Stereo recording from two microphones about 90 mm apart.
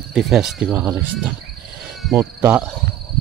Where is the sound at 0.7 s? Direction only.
25° right (ahead or behind).